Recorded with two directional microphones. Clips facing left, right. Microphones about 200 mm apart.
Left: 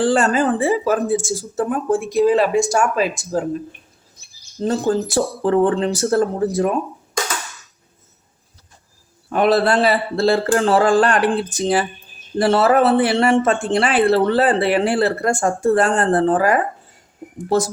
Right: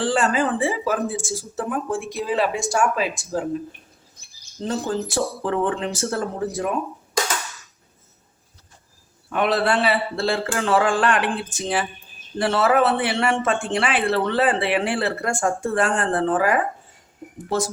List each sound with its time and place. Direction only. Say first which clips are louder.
0.0 s speech: left 4 dB; 40° left (ahead or behind)
4.6 s speech: left 6 dB; 40° left (ahead or behind)
9.3 s speech: left 5 dB; 40° left (ahead or behind)